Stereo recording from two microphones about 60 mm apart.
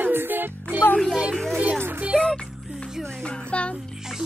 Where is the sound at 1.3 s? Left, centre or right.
Centre.